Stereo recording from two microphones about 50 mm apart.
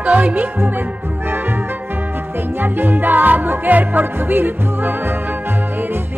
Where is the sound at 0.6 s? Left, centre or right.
Right.